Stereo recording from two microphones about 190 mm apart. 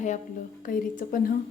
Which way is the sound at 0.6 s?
45° left (ahead or behind).